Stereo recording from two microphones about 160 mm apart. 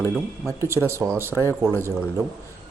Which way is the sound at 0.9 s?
15° right (ahead or behind).